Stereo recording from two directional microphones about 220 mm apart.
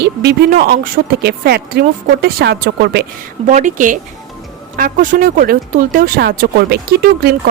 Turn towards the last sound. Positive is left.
turn(degrees=-45)  # may be behind; listen again after turning